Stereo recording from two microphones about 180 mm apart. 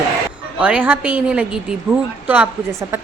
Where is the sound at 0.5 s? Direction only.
5° right (ahead or behind).